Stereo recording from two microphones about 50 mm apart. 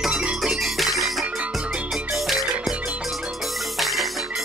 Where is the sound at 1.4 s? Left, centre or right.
Centre.